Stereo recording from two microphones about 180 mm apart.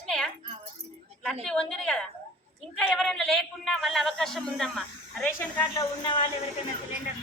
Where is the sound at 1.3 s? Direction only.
5° left (ahead or behind).